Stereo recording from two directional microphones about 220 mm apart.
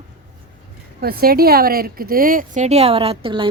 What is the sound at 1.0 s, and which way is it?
Speech, 45° right (ahead or behind).